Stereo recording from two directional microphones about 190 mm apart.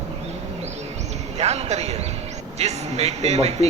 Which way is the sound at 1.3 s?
35° right (ahead or behind).